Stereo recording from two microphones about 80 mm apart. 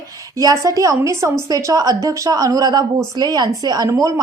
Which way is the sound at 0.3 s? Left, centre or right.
Right.